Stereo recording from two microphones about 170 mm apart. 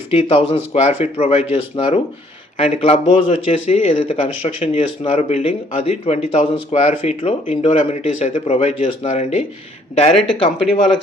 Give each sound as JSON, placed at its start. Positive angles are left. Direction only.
{"t": 0.1, "sound": "a man's voice", "side_deg": 35}